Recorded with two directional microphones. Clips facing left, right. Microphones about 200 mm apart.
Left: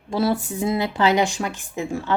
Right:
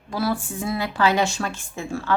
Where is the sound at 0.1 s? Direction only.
25° left (ahead or behind).